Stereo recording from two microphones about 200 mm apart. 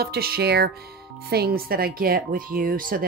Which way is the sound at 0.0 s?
50° right (ahead or behind).